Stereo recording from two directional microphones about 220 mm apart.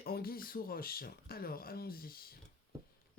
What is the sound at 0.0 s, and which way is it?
Speech, 45° left (ahead or behind).